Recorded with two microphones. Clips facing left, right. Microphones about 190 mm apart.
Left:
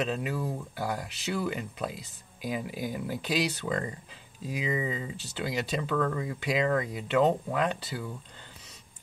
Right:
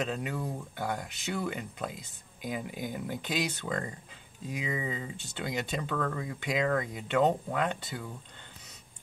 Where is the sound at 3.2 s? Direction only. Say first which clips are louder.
Left 4 dB; 35° left (ahead or behind).